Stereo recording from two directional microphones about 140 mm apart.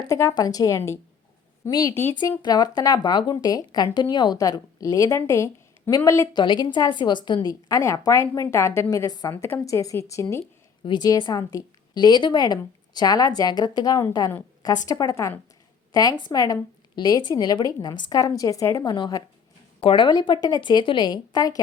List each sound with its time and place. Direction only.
0.0 s a woman's voice: 20° left (ahead or behind)